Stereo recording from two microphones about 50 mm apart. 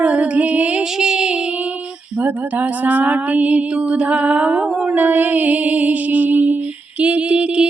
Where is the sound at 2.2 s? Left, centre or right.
Right.